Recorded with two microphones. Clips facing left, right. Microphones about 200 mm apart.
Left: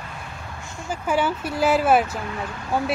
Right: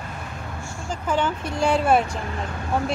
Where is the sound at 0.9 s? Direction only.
10° left (ahead or behind).